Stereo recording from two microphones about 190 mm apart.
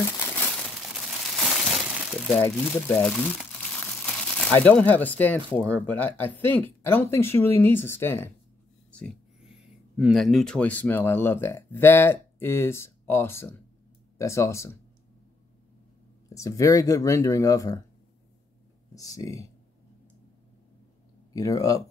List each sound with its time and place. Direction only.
0.9 s crumpling: centre (ahead or behind)
2.4 s speech: 5° left (ahead or behind)
8.9 s speech: centre (ahead or behind)
16.3 s speech: 15° left (ahead or behind)
18.9 s speech: 20° left (ahead or behind)
21.3 s speech: 20° left (ahead or behind)